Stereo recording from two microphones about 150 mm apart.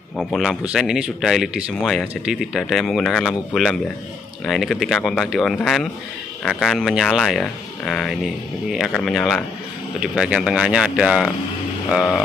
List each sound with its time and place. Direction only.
0.2 s speech: centre (ahead or behind)